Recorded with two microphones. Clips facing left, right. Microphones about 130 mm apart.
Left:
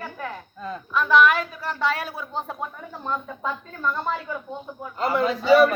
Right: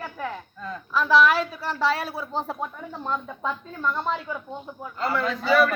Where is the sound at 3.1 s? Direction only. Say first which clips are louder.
Left 1 dB; centre (ahead or behind).